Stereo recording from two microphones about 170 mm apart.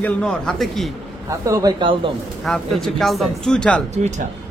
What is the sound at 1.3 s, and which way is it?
Speech, 20° right (ahead or behind).